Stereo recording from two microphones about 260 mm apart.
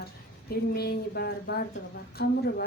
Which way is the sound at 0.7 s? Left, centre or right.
Left.